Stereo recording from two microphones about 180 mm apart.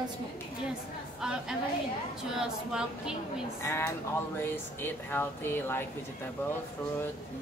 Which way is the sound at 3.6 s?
15° left (ahead or behind).